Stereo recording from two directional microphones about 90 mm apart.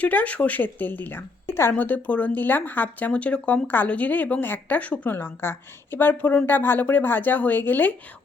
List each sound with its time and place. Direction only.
0.0 s speech: 15° left (ahead or behind)